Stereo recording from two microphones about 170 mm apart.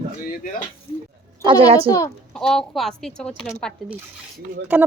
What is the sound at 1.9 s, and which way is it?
Speech, 20° left (ahead or behind).